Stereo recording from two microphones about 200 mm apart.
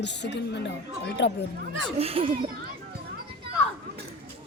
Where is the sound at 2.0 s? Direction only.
30° right (ahead or behind).